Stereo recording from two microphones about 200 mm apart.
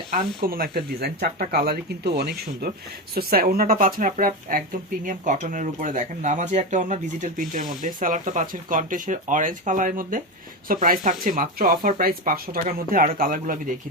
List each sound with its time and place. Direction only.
0.3 s a woman's voice: 45° right (ahead or behind)